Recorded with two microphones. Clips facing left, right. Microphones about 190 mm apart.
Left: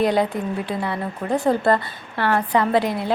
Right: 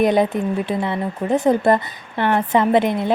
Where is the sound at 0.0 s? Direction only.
20° right (ahead or behind).